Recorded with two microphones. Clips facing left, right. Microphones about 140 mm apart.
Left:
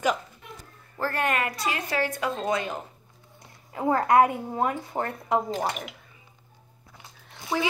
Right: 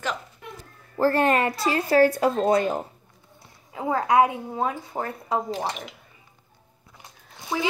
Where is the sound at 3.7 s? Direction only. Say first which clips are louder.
Left 1 dB; 5° right (ahead or behind).